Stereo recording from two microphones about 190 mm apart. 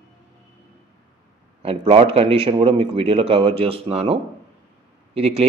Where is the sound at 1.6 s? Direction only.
30° right (ahead or behind).